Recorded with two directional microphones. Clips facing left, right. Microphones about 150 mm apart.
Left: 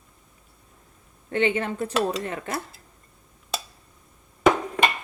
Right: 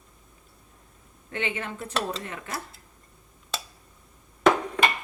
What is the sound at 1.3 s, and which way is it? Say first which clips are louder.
Speech: left 8 dB; 35° left (ahead or behind).